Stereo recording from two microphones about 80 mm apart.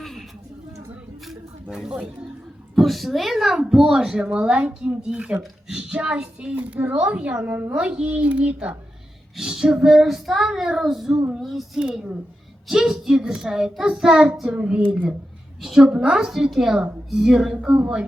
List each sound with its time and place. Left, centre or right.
0.0 s a sound: centre
1.7 s a child's voice: centre
2.7 s child singing: centre
4.2 s a child's voice: centre
7.7 s a child's voice: centre
9.4 s child singing: centre
11.8 s a child's voice: centre
15.6 s child singing: centre
15.9 s a child's voice: centre